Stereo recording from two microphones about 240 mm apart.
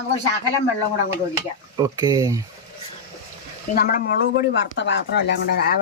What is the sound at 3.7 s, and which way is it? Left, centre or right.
Speech, left.